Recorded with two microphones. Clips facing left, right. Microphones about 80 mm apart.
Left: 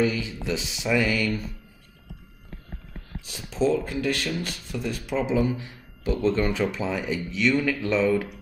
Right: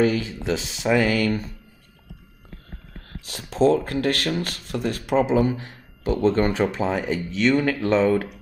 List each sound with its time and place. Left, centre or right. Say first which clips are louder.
0.0 s speech: right 4 dB; right
3.3 s speech: right 5 dB; right